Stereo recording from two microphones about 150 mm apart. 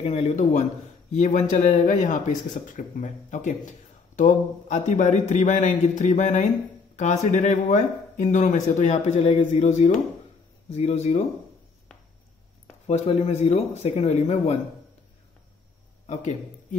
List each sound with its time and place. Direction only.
0.0 s speech: 45° left (ahead or behind)
11.9 s a sound: 5° left (ahead or behind)
12.8 s speech: 50° left (ahead or behind)